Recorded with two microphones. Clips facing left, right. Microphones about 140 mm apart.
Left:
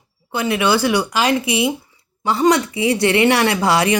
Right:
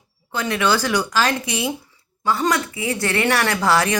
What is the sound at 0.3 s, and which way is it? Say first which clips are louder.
Speech: left 3 dB; 10° left (ahead or behind).